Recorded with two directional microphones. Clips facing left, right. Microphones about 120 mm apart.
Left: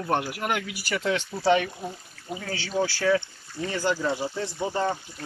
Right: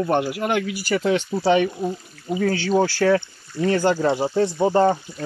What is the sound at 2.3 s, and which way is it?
Speech, 50° right (ahead or behind).